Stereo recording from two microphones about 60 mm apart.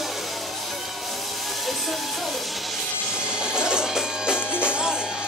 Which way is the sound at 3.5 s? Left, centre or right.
Centre.